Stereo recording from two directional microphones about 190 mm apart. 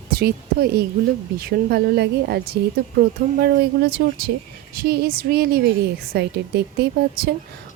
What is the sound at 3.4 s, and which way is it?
A woman's voice, 60° right (ahead or behind).